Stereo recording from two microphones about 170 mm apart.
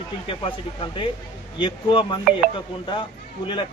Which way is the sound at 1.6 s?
30° left (ahead or behind).